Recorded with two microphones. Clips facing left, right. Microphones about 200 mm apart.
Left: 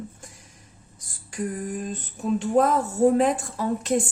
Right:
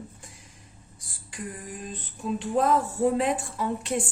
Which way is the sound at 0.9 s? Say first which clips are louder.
Left 2 dB; 45° left (ahead or behind).